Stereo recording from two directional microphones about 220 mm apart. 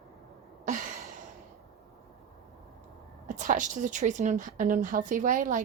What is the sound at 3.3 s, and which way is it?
Speech, 35° right (ahead or behind).